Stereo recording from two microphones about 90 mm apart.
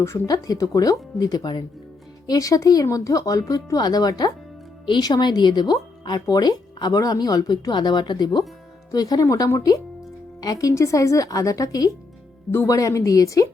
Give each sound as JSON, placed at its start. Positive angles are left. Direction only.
{"t": 0.3, "sound": "speech", "side_deg": 40}